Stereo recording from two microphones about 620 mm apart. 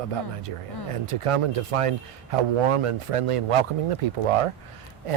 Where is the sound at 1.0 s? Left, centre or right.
Right.